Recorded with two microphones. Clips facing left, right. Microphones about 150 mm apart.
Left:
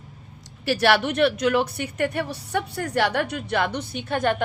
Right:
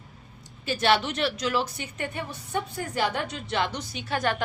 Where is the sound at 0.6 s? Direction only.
70° left (ahead or behind).